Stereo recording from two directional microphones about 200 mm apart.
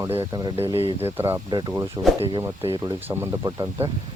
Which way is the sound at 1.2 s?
15° right (ahead or behind).